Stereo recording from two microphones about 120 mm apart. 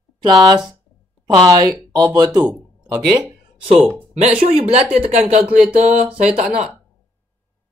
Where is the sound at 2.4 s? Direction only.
10° right (ahead or behind).